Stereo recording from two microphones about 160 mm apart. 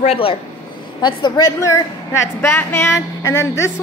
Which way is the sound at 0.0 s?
35° left (ahead or behind).